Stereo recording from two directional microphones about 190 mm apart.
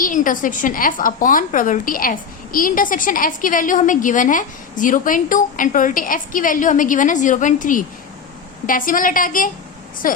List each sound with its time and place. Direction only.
0.0 s a woman's voice: 45° left (ahead or behind)